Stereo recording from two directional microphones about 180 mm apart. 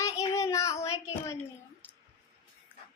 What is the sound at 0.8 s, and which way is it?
Speech, 35° left (ahead or behind).